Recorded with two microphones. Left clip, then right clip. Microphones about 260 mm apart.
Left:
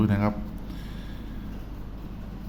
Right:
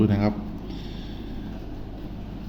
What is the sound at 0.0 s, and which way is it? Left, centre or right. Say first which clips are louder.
Speech: right 3 dB; centre.